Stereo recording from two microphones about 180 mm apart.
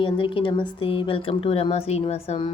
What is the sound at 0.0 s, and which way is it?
Speech, 30° left (ahead or behind).